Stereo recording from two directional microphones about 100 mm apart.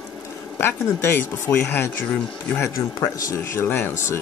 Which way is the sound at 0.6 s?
20° left (ahead or behind).